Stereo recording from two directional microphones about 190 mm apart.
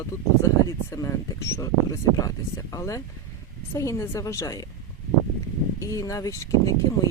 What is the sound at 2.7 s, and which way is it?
Speech, 15° left (ahead or behind).